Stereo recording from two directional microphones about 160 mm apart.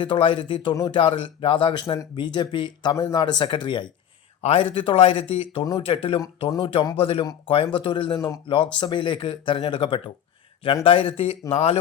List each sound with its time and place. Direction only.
0.0 s a man's voice: 30° left (ahead or behind)